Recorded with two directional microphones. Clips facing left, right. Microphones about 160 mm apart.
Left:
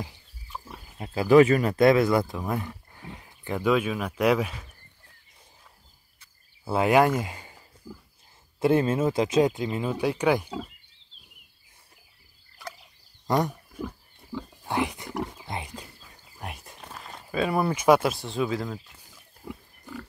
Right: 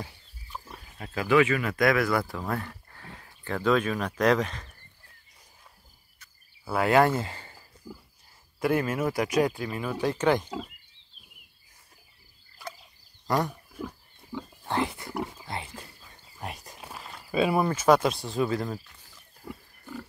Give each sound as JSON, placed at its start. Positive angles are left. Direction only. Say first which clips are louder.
{"t": 0.5, "sound": "pig", "louder": "left 1 dB", "side_deg": 5}
{"t": 0.9, "sound": "wild animals", "louder": "left 3 dB", "side_deg": 20}
{"t": 1.2, "sound": "speech", "louder": "left 5 dB", "side_deg": 40}
{"t": 6.1, "sound": "a sound", "louder": "right 2 dB", "side_deg": 25}
{"t": 8.5, "sound": "speech", "louder": "left 4 dB", "side_deg": 25}
{"t": 13.3, "sound": "speech", "louder": "left 2 dB", "side_deg": 20}
{"t": 14.6, "sound": "wild animals", "louder": "left 1 dB", "side_deg": 15}
{"t": 17.6, "sound": "speech", "louder": "left 1 dB", "side_deg": 10}
{"t": 19.4, "sound": "pig", "louder": "left 1 dB", "side_deg": 0}